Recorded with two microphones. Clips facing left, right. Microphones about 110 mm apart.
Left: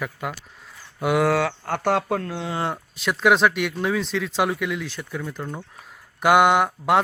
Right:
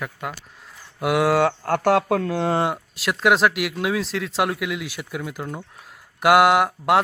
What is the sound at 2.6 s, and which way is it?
Speech, 15° right (ahead or behind).